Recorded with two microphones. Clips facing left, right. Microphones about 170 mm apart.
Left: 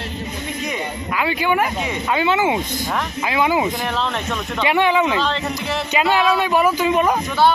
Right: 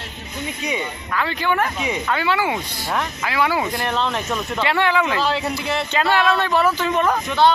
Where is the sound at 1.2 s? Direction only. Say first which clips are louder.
Left 2 dB; 15° left (ahead or behind).